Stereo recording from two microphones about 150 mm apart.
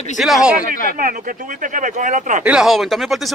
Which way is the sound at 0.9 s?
65° right (ahead or behind).